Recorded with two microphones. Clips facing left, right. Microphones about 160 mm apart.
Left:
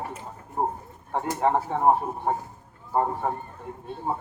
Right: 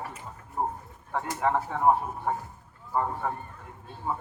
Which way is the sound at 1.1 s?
30° left (ahead or behind).